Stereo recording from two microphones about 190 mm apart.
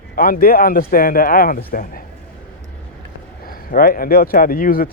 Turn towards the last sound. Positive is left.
turn(degrees=50)  # may be behind; listen again after turning